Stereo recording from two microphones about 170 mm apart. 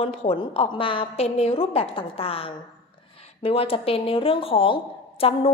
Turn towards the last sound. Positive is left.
turn(degrees=35)  # may be behind; listen again after turning